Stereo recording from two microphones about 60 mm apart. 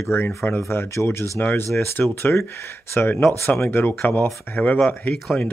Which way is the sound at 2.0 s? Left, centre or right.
Left.